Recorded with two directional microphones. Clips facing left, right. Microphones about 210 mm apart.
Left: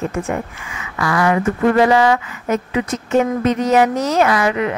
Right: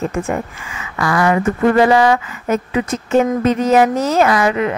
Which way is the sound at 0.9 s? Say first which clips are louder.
Right 1 dB; 40° right (ahead or behind).